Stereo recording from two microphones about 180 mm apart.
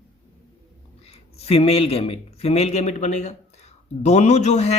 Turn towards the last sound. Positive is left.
turn(degrees=40)  # may be behind; listen again after turning